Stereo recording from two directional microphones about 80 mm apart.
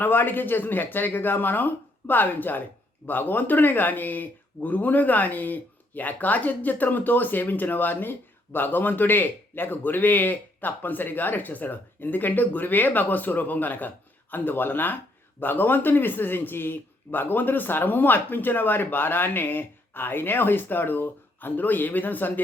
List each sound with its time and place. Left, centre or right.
0.0 s speech: left